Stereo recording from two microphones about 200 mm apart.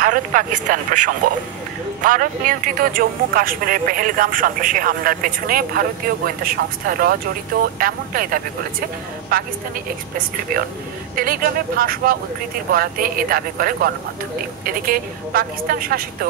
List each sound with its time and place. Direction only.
0.0 s speech: 40° right (ahead or behind)
11.1 s speech: 45° right (ahead or behind)